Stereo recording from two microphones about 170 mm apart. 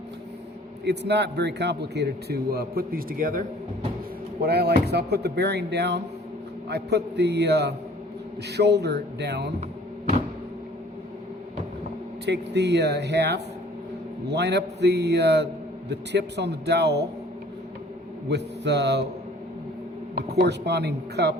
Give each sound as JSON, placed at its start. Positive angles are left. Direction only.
{"t": 0.9, "sound": "a man's voice", "side_deg": -80}
{"t": 4.4, "sound": "a man's voice", "side_deg": -70}
{"t": 12.2, "sound": "speech", "side_deg": -90}
{"t": 18.3, "sound": "speech", "side_deg": -90}
{"t": 20.1, "sound": "speech", "side_deg": -75}